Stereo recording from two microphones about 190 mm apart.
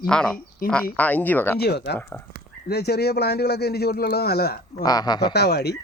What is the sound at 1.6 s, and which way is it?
A man's voice, 60° left (ahead or behind).